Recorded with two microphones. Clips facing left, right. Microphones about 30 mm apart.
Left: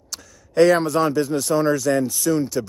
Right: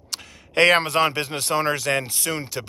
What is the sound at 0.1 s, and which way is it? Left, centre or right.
Speech, right.